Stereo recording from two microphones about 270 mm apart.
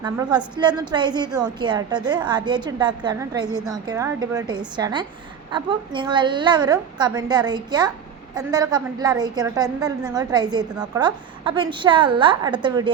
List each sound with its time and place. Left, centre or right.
0.0 s a woman's voice: centre